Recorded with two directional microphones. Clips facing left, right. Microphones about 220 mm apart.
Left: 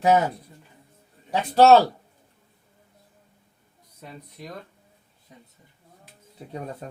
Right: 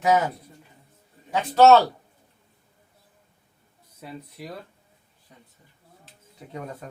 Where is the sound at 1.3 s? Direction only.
30° left (ahead or behind).